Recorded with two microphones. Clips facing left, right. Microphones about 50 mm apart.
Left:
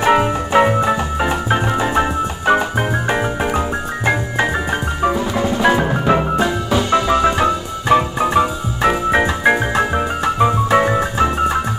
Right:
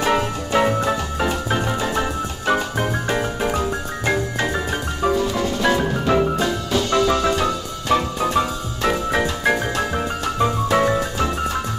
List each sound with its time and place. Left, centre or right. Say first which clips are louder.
0.0 s organ: left 6 dB; left
5.0 s music: left 1 dB; left